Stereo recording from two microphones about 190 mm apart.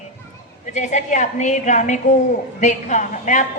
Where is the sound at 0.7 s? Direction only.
40° left (ahead or behind).